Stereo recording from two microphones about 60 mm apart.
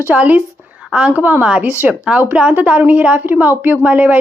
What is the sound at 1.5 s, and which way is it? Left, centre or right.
Speech, centre.